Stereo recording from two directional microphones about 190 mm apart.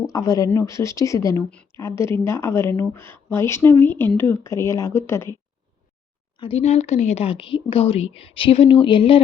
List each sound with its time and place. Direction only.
0.0 s a woman's voice: 20° left (ahead or behind)
1.5 s a woman's voice: 5° left (ahead or behind)
6.4 s a woman's voice: 35° left (ahead or behind)